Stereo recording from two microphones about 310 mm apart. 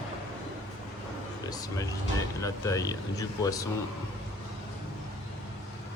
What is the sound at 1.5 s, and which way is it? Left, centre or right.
Speech, centre.